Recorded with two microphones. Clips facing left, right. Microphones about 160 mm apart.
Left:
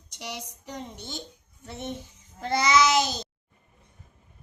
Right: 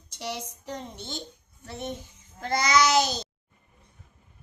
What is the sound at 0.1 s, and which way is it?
Speech, 15° left (ahead or behind).